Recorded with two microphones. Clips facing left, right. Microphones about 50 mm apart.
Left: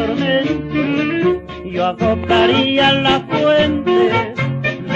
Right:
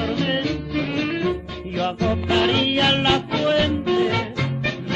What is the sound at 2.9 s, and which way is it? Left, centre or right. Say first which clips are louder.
Music: left 5 dB; left.